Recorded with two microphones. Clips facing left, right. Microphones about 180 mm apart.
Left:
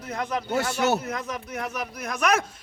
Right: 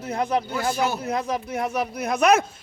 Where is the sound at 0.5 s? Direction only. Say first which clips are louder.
Left 1 dB; 75° left (ahead or behind).